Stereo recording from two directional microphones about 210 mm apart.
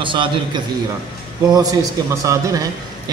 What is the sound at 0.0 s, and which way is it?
Speech, 25° right (ahead or behind).